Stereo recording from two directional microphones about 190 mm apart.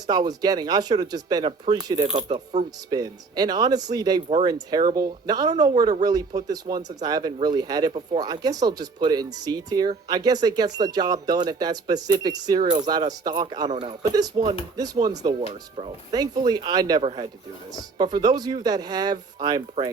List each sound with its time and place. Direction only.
0.1 s speech: 20° right (ahead or behind)
2.1 s speech: 40° right (ahead or behind)
2.6 s speech: 20° right (ahead or behind)